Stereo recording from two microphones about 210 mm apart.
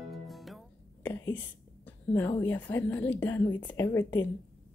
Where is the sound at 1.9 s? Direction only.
10° left (ahead or behind).